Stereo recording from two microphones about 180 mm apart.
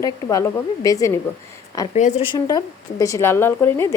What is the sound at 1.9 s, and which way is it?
Speech, 40° left (ahead or behind).